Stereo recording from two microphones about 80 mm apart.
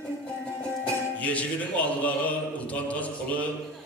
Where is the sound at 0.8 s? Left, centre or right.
Centre.